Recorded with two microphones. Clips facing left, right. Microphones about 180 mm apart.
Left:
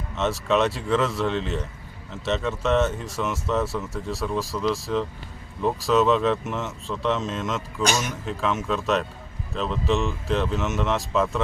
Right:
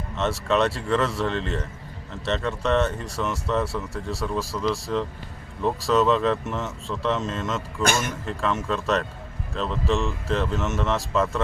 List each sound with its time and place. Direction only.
0.2 s speech: centre (ahead or behind)
7.8 s a man's voice: 55° right (ahead or behind)
8.1 s speech: centre (ahead or behind)